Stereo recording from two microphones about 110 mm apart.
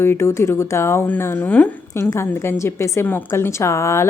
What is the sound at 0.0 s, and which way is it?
Speech, 25° left (ahead or behind).